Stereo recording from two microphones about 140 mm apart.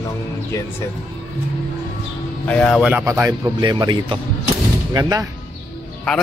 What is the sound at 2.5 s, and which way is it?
Speech, 10° left (ahead or behind).